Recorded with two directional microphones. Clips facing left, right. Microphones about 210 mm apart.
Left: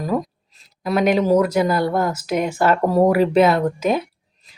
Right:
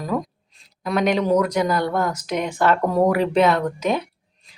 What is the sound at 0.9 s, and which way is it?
Speech, 5° left (ahead or behind).